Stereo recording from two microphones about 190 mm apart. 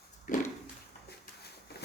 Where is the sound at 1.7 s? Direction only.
55° left (ahead or behind).